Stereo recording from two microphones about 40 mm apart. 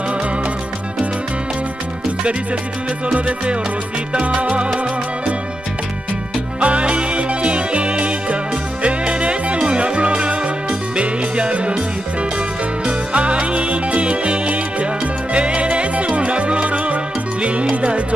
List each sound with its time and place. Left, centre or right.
3.2 s music: right
6.6 s music: right
12.8 s music: right